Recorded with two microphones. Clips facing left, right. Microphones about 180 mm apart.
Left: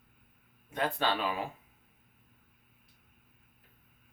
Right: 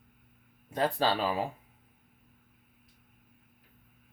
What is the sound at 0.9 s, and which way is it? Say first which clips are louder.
Speech: right 3 dB; 35° right (ahead or behind).